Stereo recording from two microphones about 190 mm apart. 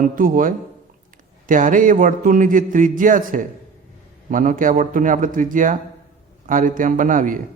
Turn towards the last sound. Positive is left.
turn(degrees=-45)  # may be behind; listen again after turning